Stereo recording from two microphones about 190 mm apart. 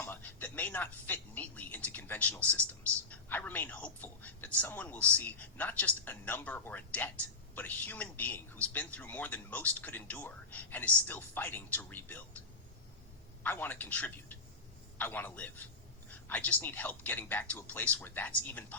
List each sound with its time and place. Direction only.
0.0 s music: 10° left (ahead or behind)
3.1 s speech: 10° left (ahead or behind)
13.4 s speech: 10° left (ahead or behind)